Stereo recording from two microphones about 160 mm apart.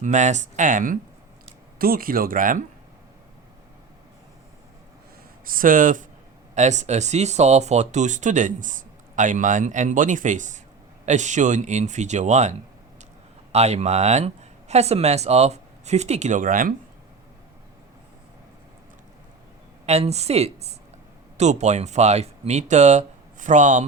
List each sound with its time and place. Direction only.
0.0 s speech: 50° right (ahead or behind)
1.8 s speech: 65° right (ahead or behind)
5.5 s speech: 60° right (ahead or behind)
19.8 s a woman's voice: 40° right (ahead or behind)